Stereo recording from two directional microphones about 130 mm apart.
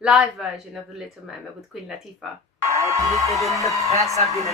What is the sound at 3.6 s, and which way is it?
Speech, 25° left (ahead or behind).